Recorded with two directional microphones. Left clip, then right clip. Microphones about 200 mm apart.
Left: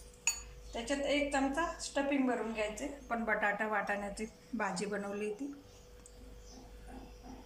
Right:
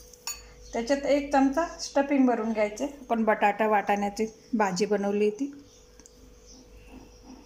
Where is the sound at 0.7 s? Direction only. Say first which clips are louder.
Right 9 dB; 45° right (ahead or behind).